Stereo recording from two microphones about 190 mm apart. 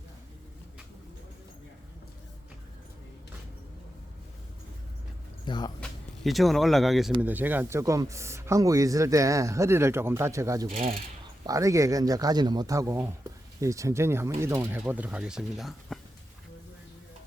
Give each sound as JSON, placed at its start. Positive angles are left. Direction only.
{"t": 5.5, "sound": "speech", "side_deg": 20}
{"t": 5.8, "sound": "speech", "side_deg": 0}